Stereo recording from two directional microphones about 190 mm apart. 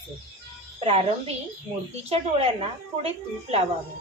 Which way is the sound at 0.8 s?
30° right (ahead or behind).